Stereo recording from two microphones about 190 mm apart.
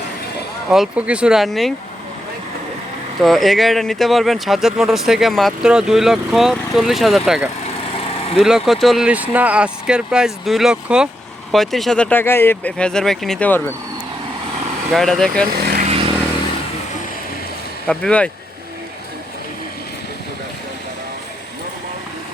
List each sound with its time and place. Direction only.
0.7 s speech: 5° right (ahead or behind)
3.2 s speech: centre (ahead or behind)
7.9 s vehicle: 30° left (ahead or behind)
8.4 s speech: centre (ahead or behind)
14.8 s speech: centre (ahead or behind)
15.8 s vehicle: 30° right (ahead or behind)
17.8 s speech: 5° left (ahead or behind)